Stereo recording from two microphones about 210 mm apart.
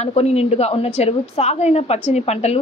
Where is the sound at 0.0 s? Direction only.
30° left (ahead or behind).